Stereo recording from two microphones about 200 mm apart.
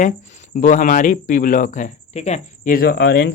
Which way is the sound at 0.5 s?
40° left (ahead or behind).